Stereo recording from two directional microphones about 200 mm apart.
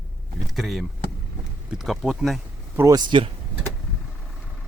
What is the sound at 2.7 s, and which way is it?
Speech, 20° right (ahead or behind).